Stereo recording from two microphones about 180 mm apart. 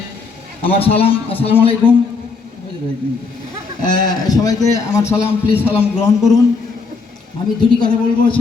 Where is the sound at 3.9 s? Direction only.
20° left (ahead or behind).